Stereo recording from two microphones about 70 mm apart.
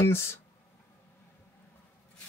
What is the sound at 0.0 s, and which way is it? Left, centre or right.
Speech, left.